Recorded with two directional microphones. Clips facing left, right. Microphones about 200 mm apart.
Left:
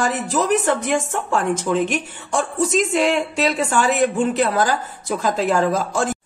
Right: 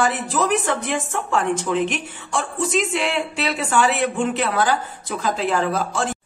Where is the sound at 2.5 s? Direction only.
40° left (ahead or behind).